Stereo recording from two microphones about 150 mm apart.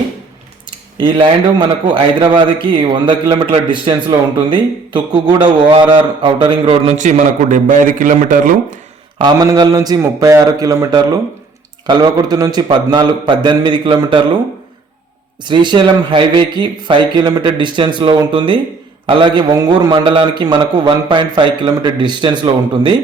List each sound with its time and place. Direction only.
0.9 s a man's voice: 30° right (ahead or behind)
6.9 s a man's voice: 55° right (ahead or behind)
9.1 s mantra: 30° right (ahead or behind)
9.5 s a man's voice: 25° right (ahead or behind)
15.4 s a man's voice: 30° right (ahead or behind)